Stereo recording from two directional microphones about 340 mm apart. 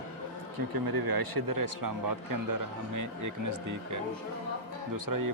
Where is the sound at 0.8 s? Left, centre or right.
Right.